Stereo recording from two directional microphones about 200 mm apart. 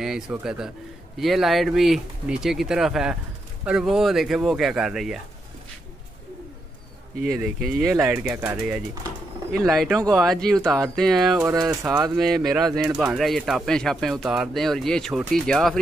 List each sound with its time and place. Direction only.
0.0 s speech: 5° right (ahead or behind)
7.2 s speech: centre (ahead or behind)
10.1 s speech: centre (ahead or behind)
11.4 s speech: 15° right (ahead or behind)
12.2 s speech: centre (ahead or behind)